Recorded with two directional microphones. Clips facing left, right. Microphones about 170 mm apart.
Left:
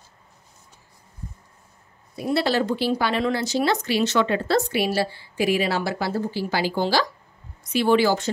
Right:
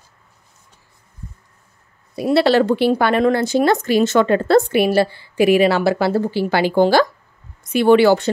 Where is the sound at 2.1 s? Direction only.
80° right; by 8.2 s 65° right (ahead or behind).